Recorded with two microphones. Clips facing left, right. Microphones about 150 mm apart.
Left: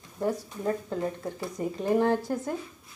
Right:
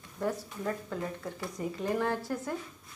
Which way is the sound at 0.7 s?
25° left (ahead or behind).